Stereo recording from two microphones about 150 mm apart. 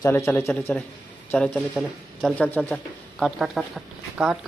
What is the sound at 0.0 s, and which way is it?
Speech, 15° left (ahead or behind).